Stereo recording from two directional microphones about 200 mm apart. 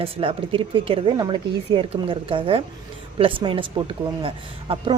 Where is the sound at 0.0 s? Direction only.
25° right (ahead or behind).